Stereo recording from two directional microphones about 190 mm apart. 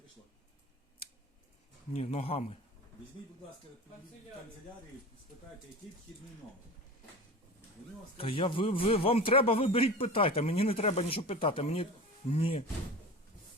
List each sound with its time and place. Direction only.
1.9 s speech: 35° left (ahead or behind)
8.2 s a man's voice: 30° left (ahead or behind)